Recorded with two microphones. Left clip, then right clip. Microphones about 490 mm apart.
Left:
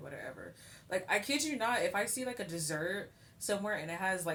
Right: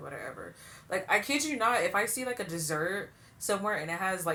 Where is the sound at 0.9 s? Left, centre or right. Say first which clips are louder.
Right 5 dB; left.